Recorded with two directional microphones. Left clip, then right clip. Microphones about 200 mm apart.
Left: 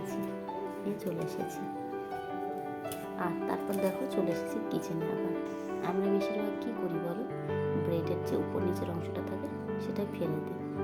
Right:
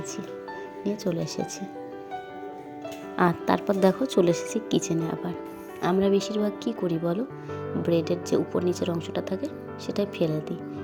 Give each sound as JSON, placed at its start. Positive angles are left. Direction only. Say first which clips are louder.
{"t": 3.2, "sound": "speech", "louder": "right 11 dB", "side_deg": -45}